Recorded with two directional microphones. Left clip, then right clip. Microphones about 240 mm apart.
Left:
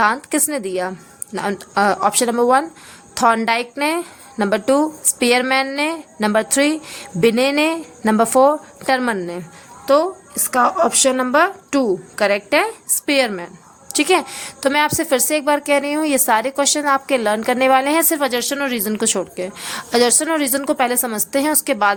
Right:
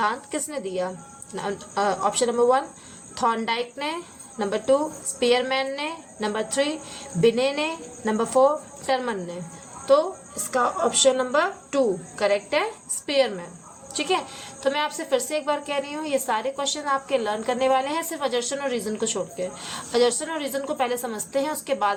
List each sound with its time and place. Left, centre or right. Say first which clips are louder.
0.0 s a woman's voice: left 8 dB; left